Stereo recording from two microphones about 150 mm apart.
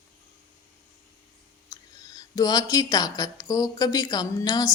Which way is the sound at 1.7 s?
25° left (ahead or behind).